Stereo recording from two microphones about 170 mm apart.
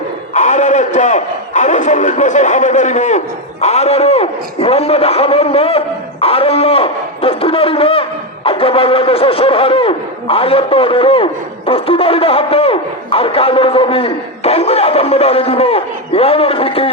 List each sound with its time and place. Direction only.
0.3 s speech: 45° left (ahead or behind)